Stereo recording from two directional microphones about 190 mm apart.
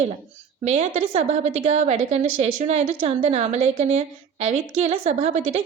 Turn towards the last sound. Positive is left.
turn(degrees=-35)  # may be behind; listen again after turning